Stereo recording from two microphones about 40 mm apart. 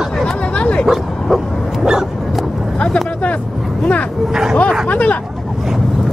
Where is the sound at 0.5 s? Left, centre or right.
Left.